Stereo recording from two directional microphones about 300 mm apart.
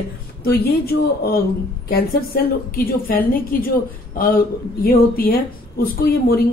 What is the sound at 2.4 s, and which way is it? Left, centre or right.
A woman's voice, left.